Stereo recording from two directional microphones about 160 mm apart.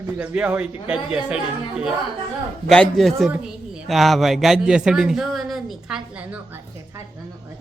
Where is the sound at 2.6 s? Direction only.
5° left (ahead or behind).